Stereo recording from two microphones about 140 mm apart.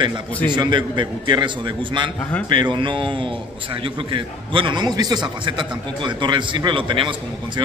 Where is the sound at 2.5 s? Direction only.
35° right (ahead or behind).